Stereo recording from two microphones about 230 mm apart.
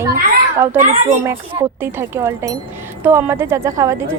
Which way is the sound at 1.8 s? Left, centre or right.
Centre.